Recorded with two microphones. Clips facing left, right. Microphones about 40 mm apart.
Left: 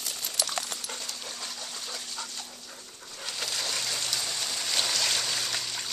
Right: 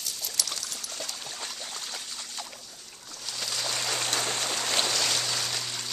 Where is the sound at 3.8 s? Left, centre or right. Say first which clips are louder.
Right 3 dB; right.